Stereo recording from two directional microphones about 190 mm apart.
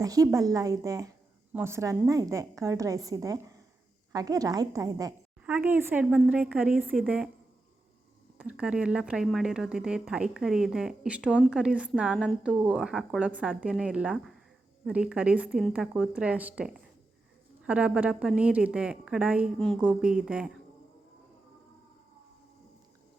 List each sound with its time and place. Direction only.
0.0 s a woman's voice: 20° right (ahead or behind)
8.4 s speech: 5° right (ahead or behind)